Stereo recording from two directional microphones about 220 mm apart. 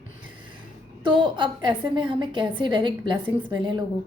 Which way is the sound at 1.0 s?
20° right (ahead or behind).